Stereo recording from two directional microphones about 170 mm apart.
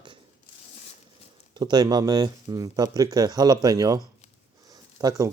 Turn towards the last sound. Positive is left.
turn(degrees=-20)  # may be behind; listen again after turning